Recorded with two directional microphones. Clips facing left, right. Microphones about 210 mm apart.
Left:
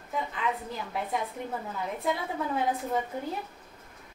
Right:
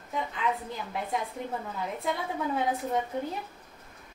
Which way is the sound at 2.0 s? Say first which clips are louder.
Left 1 dB; centre (ahead or behind).